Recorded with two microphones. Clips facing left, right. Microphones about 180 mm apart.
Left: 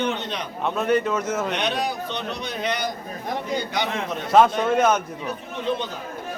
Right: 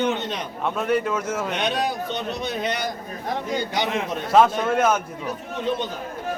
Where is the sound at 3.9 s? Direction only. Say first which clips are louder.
Even; 5° right (ahead or behind).